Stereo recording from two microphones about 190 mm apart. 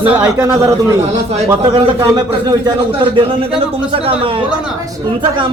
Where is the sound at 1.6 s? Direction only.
20° right (ahead or behind).